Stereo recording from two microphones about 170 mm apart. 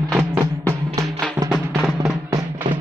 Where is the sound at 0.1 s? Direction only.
5° right (ahead or behind).